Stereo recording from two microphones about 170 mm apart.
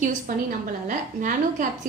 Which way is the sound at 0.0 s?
50° right (ahead or behind).